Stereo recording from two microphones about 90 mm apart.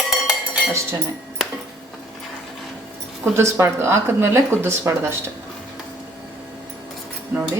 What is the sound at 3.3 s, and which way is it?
Speech, 30° right (ahead or behind).